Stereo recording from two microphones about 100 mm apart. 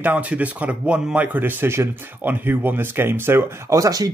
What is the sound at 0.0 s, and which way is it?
Speech, 15° right (ahead or behind).